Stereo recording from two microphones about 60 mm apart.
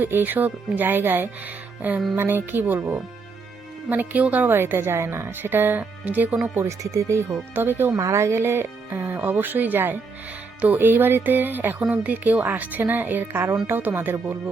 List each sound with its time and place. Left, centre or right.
0.0 s a woman's voice: right
6.7 s speech: right
7.5 s a woman's voice: right
7.9 s a woman's voice: right